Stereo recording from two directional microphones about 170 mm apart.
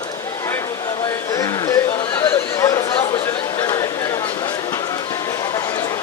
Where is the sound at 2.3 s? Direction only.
20° left (ahead or behind).